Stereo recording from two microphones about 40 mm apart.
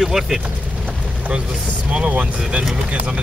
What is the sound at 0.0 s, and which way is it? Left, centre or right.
Speech, centre.